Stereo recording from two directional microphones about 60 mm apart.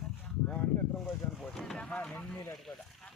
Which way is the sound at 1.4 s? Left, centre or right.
Centre.